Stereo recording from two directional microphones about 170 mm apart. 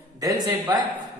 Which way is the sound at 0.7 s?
20° right (ahead or behind).